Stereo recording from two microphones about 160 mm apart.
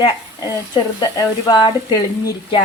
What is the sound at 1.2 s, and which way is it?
Speech, 25° left (ahead or behind).